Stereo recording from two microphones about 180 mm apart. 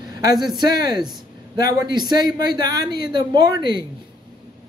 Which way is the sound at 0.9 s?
25° right (ahead or behind).